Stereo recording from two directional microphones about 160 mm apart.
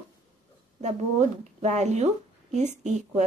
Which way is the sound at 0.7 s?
45° right (ahead or behind).